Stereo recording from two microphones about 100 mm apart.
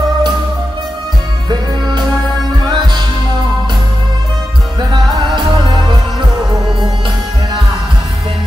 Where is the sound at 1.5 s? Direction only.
45° right (ahead or behind).